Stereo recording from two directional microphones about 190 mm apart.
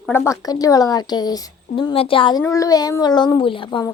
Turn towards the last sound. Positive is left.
turn(degrees=25)  # may be behind; listen again after turning